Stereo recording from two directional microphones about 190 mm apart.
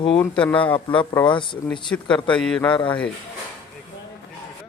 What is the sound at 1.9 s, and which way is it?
Speech, 10° left (ahead or behind).